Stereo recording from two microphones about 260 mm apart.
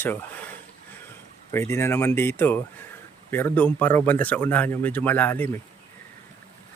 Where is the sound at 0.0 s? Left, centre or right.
Centre.